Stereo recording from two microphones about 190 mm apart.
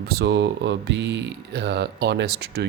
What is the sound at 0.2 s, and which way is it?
Mantra, 65° right (ahead or behind).